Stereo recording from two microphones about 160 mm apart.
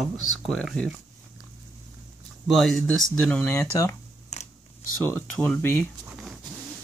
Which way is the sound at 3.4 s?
15° left (ahead or behind).